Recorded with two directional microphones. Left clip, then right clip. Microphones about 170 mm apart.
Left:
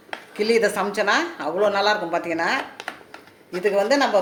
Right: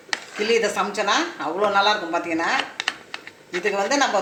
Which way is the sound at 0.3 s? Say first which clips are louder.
Left 1 dB; 65° left (ahead or behind).